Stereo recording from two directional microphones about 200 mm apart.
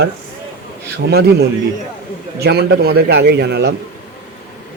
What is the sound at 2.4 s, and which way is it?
A man's voice, 55° right (ahead or behind).